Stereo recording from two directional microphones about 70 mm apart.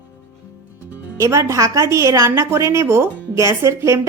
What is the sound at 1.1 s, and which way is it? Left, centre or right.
A woman's voice, right.